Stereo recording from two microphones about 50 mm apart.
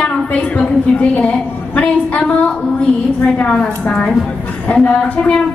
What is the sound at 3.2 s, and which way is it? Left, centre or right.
Speech, left.